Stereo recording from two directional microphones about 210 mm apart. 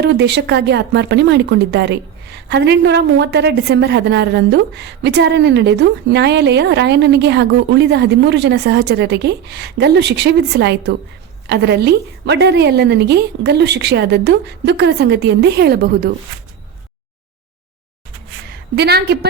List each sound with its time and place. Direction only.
0.0 s speech: 55° right (ahead or behind)
18.4 s a woman's voice: 50° right (ahead or behind)